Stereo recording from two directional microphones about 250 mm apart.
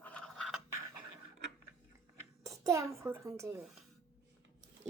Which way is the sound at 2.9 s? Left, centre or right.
Centre.